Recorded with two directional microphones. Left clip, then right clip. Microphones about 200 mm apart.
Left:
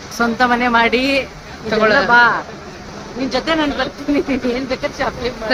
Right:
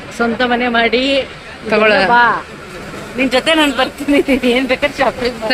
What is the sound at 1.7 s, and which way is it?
Speech, 30° right (ahead or behind).